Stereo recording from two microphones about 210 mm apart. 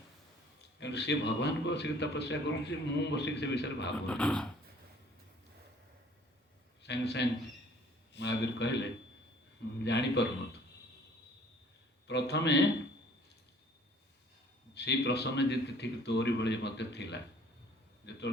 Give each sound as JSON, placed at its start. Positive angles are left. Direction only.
{"t": 0.8, "sound": "a man's voice", "side_deg": 55}
{"t": 4.0, "sound": "speech", "side_deg": 5}
{"t": 6.8, "sound": "a man's voice", "side_deg": 55}
{"t": 12.0, "sound": "a man's voice", "side_deg": 55}
{"t": 14.8, "sound": "a man's voice", "side_deg": 55}